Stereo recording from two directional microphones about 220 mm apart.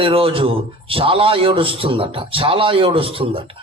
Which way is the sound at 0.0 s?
25° right (ahead or behind).